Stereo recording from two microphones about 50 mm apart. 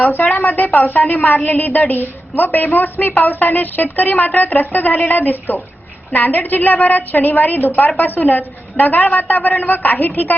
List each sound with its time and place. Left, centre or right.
0.0 s a woman's voice: left